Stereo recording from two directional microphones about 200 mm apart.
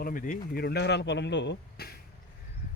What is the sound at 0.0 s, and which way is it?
Speech, 45° left (ahead or behind).